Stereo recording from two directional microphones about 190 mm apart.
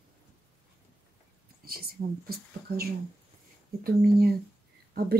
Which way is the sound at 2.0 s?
45° right (ahead or behind).